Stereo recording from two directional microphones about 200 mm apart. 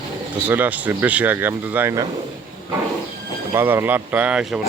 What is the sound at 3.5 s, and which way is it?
Speech, 10° right (ahead or behind).